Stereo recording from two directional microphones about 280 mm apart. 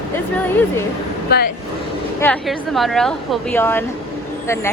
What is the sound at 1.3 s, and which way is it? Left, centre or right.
Speech, left.